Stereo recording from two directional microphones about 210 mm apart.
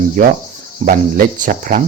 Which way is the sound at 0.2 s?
40° right (ahead or behind).